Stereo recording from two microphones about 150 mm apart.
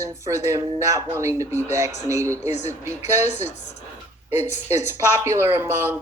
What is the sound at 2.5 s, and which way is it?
A woman's voice, 50° left (ahead or behind).